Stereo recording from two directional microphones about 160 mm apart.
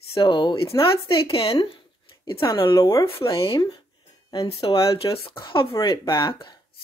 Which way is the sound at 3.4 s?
30° left (ahead or behind).